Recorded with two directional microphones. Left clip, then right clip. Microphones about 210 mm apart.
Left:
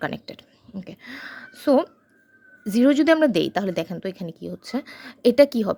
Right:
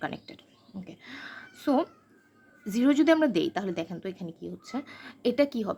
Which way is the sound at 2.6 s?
30° left (ahead or behind).